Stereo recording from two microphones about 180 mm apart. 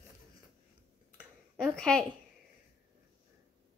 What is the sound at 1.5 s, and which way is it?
Speech, 5° left (ahead or behind).